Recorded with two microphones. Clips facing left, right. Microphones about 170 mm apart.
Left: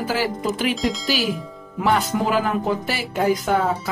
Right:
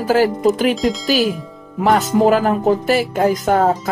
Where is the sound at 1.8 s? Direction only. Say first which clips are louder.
Right 7 dB; 45° right (ahead or behind).